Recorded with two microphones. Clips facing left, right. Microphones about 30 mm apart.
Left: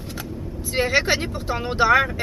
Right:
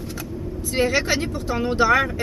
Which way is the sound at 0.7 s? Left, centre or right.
Centre.